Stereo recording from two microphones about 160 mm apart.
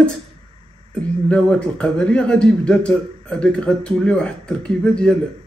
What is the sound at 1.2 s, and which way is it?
A man's voice, 5° left (ahead or behind).